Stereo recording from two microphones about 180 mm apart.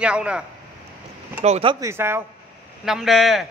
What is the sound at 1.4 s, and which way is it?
Speech, 35° right (ahead or behind).